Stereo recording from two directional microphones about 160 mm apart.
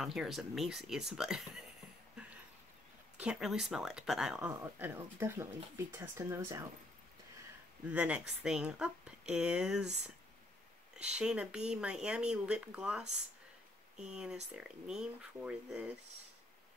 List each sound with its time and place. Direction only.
0.0 s speech: centre (ahead or behind)
3.2 s speech: 5° right (ahead or behind)
7.9 s speech: 10° right (ahead or behind)
11.1 s speech: 5° right (ahead or behind)
14.0 s speech: 5° right (ahead or behind)